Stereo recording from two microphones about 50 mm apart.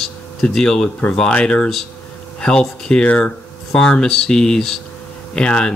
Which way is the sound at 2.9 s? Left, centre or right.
Centre.